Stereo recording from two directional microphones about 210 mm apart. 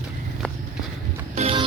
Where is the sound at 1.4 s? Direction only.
25° right (ahead or behind).